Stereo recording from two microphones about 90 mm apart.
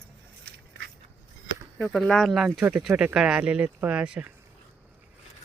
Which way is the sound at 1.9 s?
5° left (ahead or behind).